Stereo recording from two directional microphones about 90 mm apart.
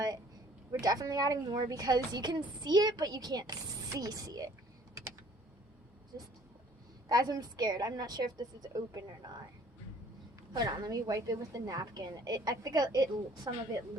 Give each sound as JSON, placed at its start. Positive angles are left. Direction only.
{"t": 0.7, "sound": "speech", "side_deg": -45}
{"t": 7.1, "sound": "speech", "side_deg": -45}
{"t": 10.5, "sound": "speech", "side_deg": -50}